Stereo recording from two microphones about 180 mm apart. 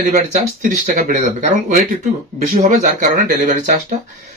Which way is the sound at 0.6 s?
45° right (ahead or behind).